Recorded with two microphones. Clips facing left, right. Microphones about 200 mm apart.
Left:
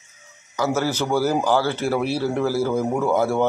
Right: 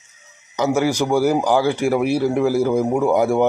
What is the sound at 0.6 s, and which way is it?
Speech, 15° right (ahead or behind).